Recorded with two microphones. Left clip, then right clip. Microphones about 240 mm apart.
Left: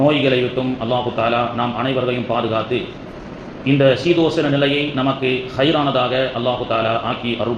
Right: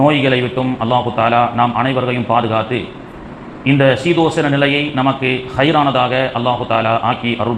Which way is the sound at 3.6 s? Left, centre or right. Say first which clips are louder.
Right 2 dB; right.